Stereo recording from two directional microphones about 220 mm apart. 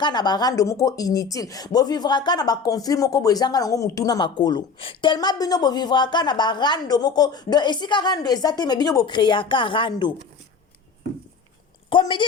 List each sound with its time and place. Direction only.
0.0 s speech: 20° left (ahead or behind)
11.9 s a woman's voice: 20° left (ahead or behind)